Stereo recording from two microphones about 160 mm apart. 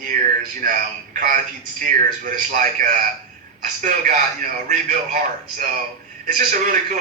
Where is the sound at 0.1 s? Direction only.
75° right (ahead or behind).